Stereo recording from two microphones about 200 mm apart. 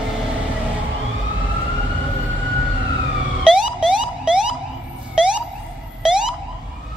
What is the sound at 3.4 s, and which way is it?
Emergency vehicle, 5° right (ahead or behind).